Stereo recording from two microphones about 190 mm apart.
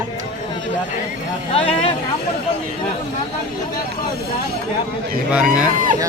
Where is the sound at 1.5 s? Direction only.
30° left (ahead or behind).